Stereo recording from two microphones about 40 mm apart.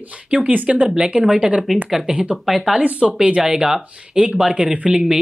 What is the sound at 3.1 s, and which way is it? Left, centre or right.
Speech, centre.